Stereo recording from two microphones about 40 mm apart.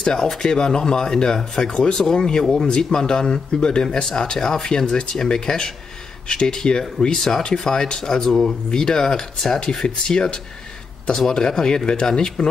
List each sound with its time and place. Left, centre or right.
0.0 s speech: centre
7.2 s speech: centre